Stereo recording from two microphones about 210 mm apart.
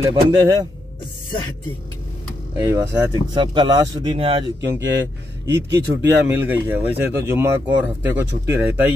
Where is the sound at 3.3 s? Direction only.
20° right (ahead or behind).